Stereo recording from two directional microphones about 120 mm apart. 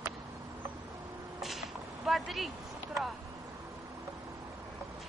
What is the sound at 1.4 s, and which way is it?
Whip, centre (ahead or behind).